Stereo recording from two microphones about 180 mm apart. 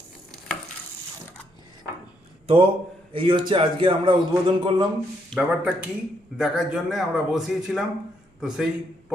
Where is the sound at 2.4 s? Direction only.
30° right (ahead or behind).